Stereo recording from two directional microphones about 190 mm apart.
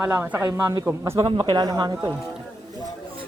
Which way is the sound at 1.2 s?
25° right (ahead or behind).